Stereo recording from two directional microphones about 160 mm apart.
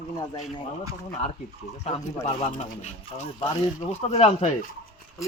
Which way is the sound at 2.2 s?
40° left (ahead or behind).